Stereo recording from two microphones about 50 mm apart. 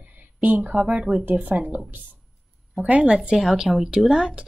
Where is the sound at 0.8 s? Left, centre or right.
Centre.